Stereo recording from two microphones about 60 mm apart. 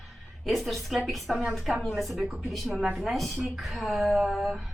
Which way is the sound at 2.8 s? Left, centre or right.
Centre.